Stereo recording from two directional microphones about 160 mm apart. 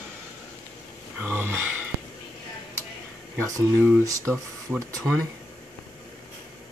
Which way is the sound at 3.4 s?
15° right (ahead or behind).